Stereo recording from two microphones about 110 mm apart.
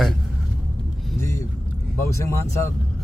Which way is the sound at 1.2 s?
25° left (ahead or behind).